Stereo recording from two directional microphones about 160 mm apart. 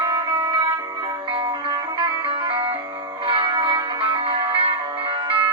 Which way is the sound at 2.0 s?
30° right (ahead or behind).